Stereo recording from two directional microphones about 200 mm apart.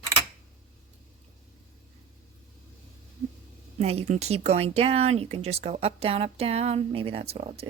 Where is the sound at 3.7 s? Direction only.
35° right (ahead or behind).